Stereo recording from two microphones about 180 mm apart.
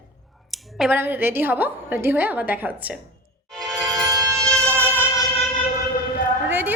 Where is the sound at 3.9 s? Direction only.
20° right (ahead or behind).